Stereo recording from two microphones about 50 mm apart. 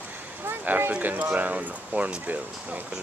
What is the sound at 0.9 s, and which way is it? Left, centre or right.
Speech, right.